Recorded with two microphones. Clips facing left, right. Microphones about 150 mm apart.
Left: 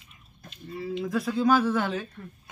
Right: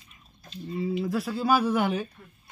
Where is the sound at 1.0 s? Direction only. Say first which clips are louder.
Left 2 dB; 5° right (ahead or behind).